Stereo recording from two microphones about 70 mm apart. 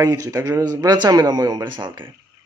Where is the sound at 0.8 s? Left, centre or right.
Right.